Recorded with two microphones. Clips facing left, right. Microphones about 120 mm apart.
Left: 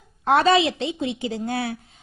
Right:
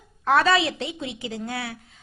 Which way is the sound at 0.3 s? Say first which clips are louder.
Left 3 dB; 25° left (ahead or behind).